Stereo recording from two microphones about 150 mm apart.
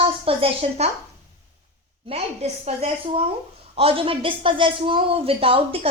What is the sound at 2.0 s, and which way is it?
Speech, 45° right (ahead or behind).